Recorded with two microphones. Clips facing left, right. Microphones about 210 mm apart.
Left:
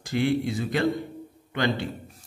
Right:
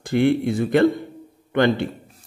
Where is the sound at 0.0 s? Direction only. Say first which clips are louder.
Right 6 dB; 55° right (ahead or behind).